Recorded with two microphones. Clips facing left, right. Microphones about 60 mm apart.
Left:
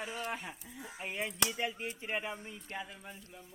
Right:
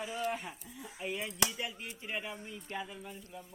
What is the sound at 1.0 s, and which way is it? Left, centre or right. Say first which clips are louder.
Speech: right 1 dB; left.